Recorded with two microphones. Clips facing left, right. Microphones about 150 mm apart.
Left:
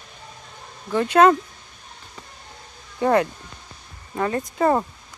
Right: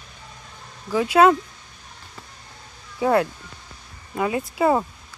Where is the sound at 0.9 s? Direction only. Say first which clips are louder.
Even; 5° right (ahead or behind).